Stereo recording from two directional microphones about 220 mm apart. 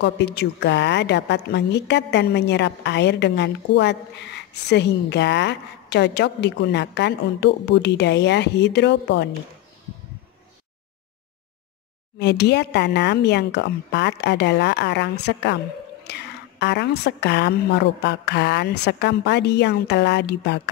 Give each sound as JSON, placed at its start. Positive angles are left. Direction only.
{"t": 0.0, "sound": "a woman's voice", "side_deg": 50}
{"t": 12.2, "sound": "a woman's voice", "side_deg": 50}